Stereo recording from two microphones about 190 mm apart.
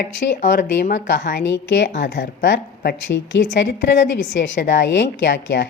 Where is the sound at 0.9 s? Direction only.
60° left (ahead or behind).